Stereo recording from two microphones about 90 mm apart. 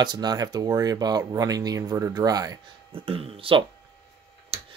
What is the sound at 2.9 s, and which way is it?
Speech, 90° right.